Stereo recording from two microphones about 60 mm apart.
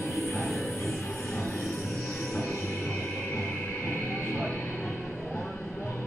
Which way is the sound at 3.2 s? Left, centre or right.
Left.